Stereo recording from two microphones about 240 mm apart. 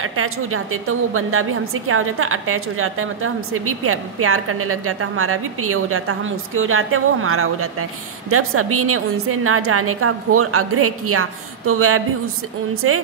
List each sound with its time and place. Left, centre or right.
0.0 s a woman's voice: right